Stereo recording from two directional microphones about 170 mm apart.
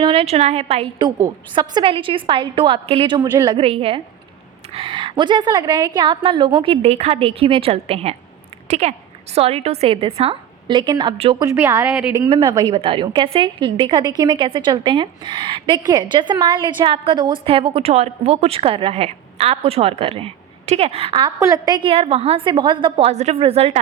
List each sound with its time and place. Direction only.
0.0 s a woman's voice: 30° right (ahead or behind)
11.4 s a woman's voice: 15° right (ahead or behind)
12.3 s a woman's voice: 25° right (ahead or behind)